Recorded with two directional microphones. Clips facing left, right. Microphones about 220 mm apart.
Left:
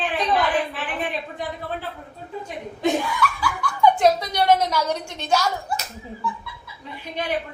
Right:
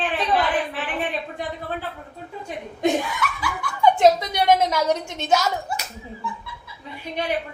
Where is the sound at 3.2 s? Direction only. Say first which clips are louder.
Left 3 dB; 20° right (ahead or behind).